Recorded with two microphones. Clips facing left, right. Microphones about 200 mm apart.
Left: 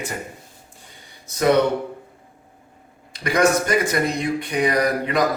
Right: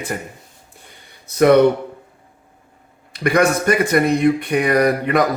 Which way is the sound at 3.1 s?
60° right (ahead or behind).